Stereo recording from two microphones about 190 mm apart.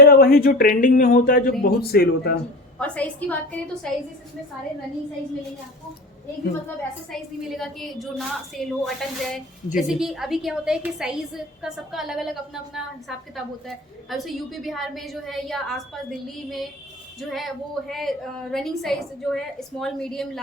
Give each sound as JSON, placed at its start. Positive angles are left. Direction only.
{"t": 0.0, "sound": "speech", "side_deg": 55}
{"t": 2.7, "sound": "a woman's voice", "side_deg": 5}
{"t": 7.1, "sound": "a woman's voice", "side_deg": 0}